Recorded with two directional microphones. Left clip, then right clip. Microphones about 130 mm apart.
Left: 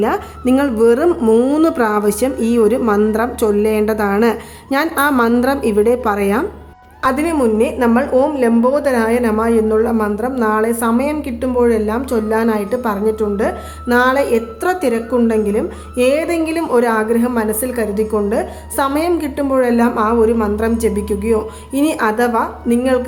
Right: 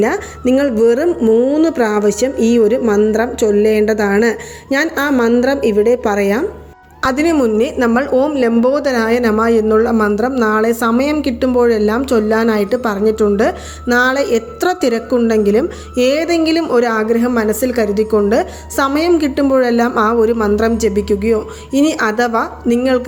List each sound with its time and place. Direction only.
0.0 s a woman's voice: 20° right (ahead or behind)
1.2 s speech: 5° left (ahead or behind)
1.6 s a woman's voice: 15° right (ahead or behind)